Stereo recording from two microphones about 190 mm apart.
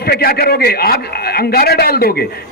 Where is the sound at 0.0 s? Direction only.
55° left (ahead or behind).